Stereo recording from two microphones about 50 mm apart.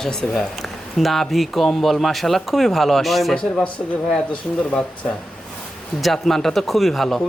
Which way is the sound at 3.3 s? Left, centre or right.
Centre.